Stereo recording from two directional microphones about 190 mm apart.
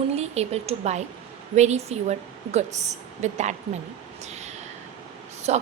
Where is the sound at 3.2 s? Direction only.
40° right (ahead or behind).